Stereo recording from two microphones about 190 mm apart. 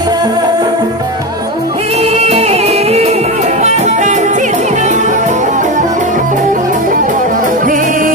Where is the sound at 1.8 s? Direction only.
35° right (ahead or behind).